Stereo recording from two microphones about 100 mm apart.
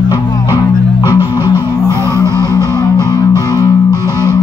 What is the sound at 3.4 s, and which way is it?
Music, 35° left (ahead or behind).